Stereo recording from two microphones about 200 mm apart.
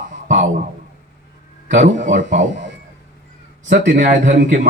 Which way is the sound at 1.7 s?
35° right (ahead or behind).